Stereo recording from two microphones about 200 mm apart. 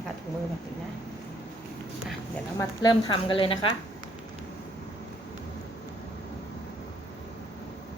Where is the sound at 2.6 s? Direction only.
20° left (ahead or behind).